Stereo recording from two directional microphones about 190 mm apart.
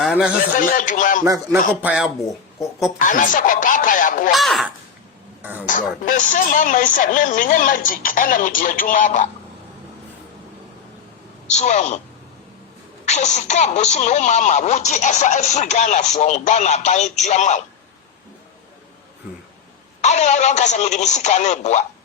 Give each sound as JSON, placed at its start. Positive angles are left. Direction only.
{"t": 0.0, "sound": "a sound", "side_deg": 0}
{"t": 0.8, "sound": "speech", "side_deg": 45}
{"t": 1.2, "sound": "speech", "side_deg": -15}
{"t": 3.0, "sound": "speech", "side_deg": 45}
{"t": 4.3, "sound": "speech", "side_deg": 0}
{"t": 5.6, "sound": "speech", "side_deg": 45}
{"t": 11.4, "sound": "speech", "side_deg": 35}
{"t": 13.1, "sound": "speech", "side_deg": 40}
{"t": 20.0, "sound": "speech", "side_deg": 40}